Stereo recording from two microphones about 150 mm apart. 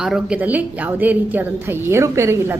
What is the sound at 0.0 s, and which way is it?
A woman's voice, 5° right (ahead or behind).